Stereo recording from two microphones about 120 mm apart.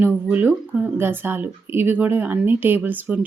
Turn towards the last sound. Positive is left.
turn(degrees=-15)  # may be behind; listen again after turning